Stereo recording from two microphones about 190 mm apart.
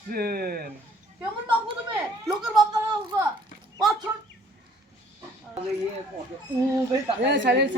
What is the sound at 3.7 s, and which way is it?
Speech, 20° right (ahead or behind).